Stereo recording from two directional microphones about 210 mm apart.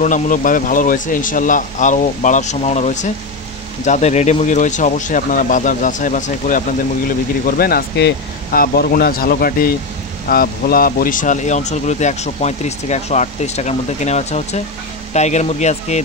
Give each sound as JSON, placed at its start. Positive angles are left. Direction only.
{"t": 0.0, "sound": "speech", "side_deg": 40}